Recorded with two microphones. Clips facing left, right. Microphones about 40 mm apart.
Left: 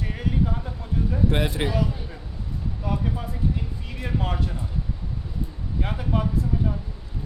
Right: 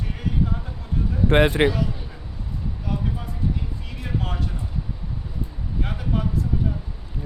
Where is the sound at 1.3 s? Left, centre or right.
Right.